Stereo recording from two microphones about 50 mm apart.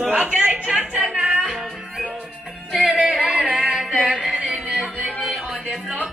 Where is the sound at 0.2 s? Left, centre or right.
Right.